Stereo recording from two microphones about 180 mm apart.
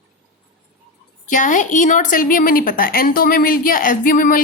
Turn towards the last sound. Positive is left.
turn(degrees=50)  # may be behind; listen again after turning